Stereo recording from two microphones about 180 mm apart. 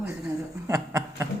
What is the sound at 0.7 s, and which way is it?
Snicker, 15° right (ahead or behind).